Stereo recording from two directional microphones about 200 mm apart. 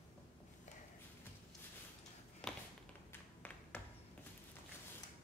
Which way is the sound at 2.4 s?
5° left (ahead or behind).